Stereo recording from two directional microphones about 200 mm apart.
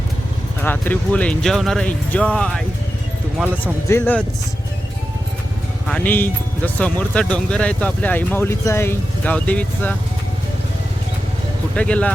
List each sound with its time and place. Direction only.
0.6 s speech: 10° left (ahead or behind)
3.3 s speech: 10° right (ahead or behind)
3.6 s speech: 10° left (ahead or behind)
5.9 s speech: 10° left (ahead or behind)
11.7 s speech: 5° left (ahead or behind)